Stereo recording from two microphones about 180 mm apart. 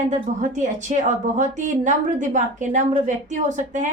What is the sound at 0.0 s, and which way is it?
A woman's voice, 40° right (ahead or behind).